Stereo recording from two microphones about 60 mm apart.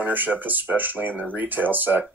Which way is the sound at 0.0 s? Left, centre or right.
Right.